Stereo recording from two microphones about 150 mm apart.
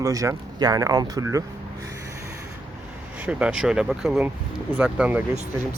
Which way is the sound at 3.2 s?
10° right (ahead or behind).